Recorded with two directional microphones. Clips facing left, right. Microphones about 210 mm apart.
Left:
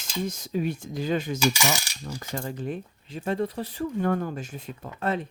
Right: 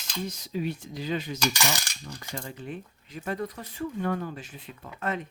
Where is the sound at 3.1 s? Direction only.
30° left (ahead or behind).